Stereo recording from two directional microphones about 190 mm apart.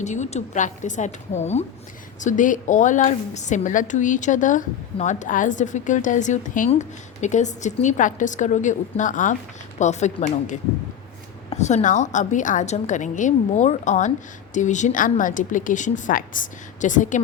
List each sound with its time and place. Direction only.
0.0 s a woman's voice: 40° left (ahead or behind)